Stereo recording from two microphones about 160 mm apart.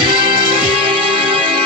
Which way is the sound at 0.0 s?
30° right (ahead or behind).